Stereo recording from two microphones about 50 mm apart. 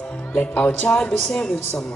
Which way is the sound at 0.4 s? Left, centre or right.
Left.